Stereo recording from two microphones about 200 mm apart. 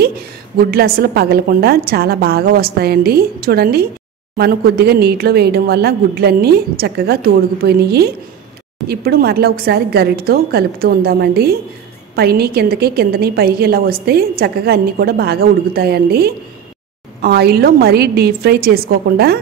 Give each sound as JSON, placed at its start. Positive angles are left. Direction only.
{"t": 0.7, "sound": "a woman's voice", "side_deg": -50}